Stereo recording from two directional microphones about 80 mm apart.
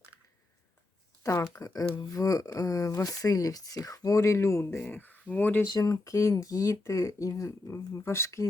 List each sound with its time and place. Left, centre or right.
1.2 s speech: left
4.8 s speech: left
5.6 s speech: left